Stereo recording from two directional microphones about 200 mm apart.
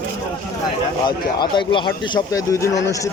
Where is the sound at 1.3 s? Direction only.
20° left (ahead or behind).